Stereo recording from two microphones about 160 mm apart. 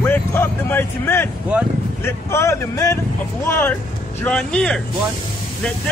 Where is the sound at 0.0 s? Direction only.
15° left (ahead or behind).